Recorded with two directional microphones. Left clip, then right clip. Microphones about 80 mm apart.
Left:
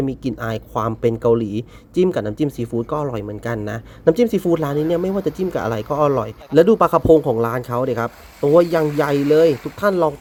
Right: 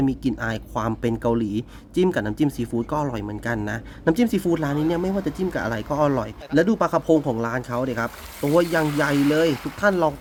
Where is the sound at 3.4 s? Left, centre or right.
Left.